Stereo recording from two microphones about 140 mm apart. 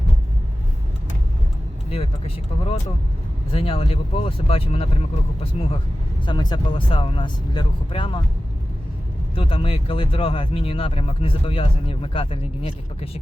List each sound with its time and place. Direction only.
1.9 s speech: 45° left (ahead or behind)
6.2 s speech: 30° left (ahead or behind)
9.3 s speech: 40° left (ahead or behind)